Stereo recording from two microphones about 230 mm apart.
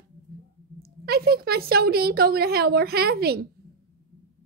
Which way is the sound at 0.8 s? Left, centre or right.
Right.